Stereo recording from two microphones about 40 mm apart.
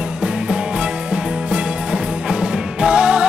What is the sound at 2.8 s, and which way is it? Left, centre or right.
Music, right.